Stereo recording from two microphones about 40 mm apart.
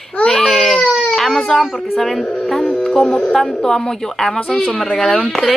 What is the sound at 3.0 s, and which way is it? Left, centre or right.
Speech, left.